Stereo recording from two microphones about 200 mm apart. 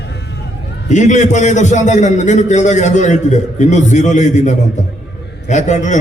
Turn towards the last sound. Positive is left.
turn(degrees=35)  # may be behind; listen again after turning